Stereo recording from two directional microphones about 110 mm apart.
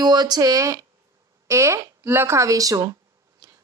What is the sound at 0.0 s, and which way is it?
Speech, 40° right (ahead or behind).